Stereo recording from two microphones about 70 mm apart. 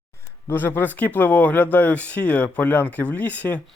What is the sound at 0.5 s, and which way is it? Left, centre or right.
Speech, left.